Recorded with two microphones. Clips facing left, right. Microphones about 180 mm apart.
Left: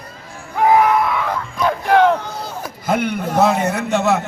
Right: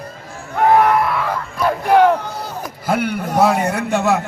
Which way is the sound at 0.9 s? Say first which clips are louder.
Even; 5° right (ahead or behind).